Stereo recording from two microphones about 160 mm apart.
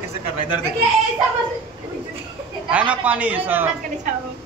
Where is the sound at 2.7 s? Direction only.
10° right (ahead or behind).